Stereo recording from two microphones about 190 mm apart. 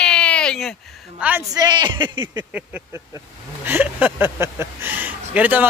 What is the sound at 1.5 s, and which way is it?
Speech, 20° right (ahead or behind).